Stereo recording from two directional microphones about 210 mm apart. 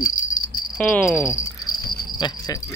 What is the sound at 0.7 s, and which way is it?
Cricket, 5° left (ahead or behind).